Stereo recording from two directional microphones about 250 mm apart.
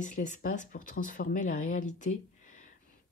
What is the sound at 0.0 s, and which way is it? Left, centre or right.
Speech, left.